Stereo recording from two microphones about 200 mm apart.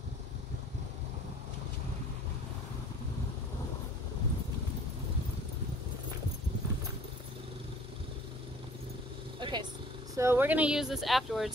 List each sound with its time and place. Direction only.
9.4 s vehicle: 20° right (ahead or behind)
10.1 s speech: 10° right (ahead or behind)